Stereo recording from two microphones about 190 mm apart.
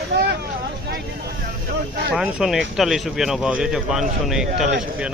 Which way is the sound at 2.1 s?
5° right (ahead or behind).